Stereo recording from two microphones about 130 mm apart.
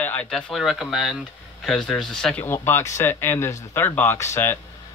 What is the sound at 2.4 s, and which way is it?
Speech, 20° left (ahead or behind).